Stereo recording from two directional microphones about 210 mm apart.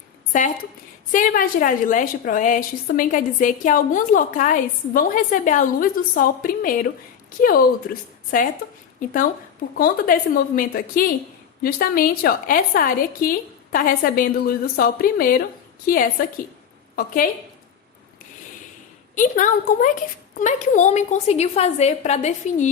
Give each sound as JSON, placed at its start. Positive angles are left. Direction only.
{"t": 0.3, "sound": "a woman's voice", "side_deg": 35}
{"t": 8.3, "sound": "a woman's voice", "side_deg": 40}
{"t": 16.9, "sound": "a woman's voice", "side_deg": 45}
{"t": 19.1, "sound": "a woman's voice", "side_deg": 40}